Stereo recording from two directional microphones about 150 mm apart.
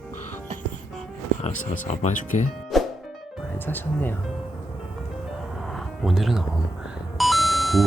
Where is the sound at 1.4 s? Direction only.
50° left (ahead or behind).